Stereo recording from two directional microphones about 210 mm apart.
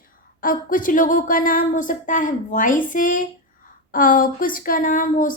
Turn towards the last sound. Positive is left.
turn(degrees=40)  # may be behind; listen again after turning